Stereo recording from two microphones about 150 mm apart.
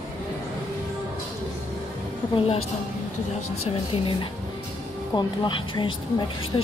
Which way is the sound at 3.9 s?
40° left (ahead or behind).